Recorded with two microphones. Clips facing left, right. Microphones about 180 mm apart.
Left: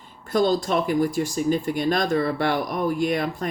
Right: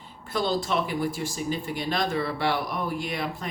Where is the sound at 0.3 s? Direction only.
45° left (ahead or behind).